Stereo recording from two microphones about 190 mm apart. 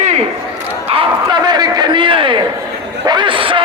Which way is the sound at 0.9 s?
25° right (ahead or behind).